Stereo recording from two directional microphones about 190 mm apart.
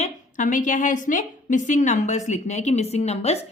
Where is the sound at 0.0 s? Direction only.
45° left (ahead or behind).